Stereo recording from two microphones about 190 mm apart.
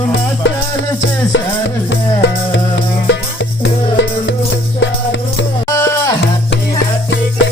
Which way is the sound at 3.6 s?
75° left (ahead or behind).